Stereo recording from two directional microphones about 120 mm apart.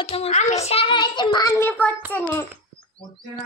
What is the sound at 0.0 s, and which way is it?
A child's voice, 60° left (ahead or behind).